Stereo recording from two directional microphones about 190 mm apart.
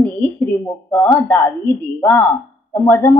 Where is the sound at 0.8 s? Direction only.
15° left (ahead or behind).